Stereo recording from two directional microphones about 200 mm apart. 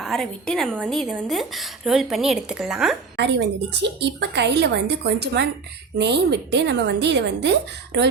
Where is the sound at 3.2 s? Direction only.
60° right (ahead or behind).